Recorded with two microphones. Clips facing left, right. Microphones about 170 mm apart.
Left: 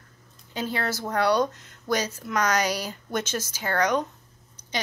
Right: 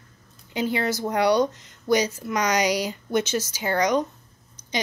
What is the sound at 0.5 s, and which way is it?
Speech, 15° right (ahead or behind).